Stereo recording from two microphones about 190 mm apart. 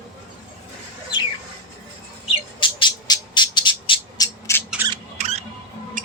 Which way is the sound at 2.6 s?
25° left (ahead or behind).